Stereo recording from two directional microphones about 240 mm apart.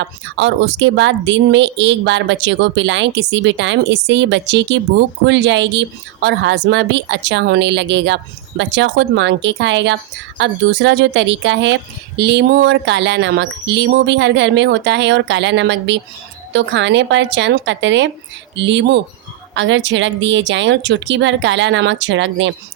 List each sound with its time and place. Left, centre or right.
0.0 s speech: right